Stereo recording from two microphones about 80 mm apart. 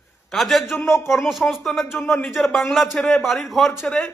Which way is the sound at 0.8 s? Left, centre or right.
Left.